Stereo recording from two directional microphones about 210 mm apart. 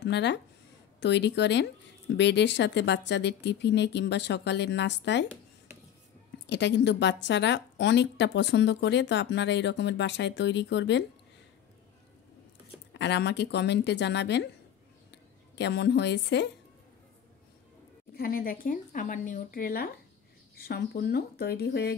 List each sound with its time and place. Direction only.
0.0 s a woman's voice: 55° left (ahead or behind)
6.4 s a woman's voice: 55° left (ahead or behind)
12.9 s speech: 55° left (ahead or behind)
18.1 s speech: 45° left (ahead or behind)